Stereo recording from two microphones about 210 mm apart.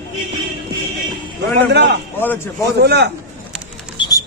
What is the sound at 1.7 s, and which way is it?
Speech, 55° right (ahead or behind).